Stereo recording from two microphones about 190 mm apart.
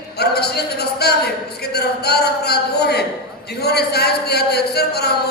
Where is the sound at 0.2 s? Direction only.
60° left (ahead or behind).